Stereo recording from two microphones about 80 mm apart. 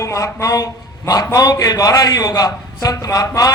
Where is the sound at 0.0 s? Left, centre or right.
Left.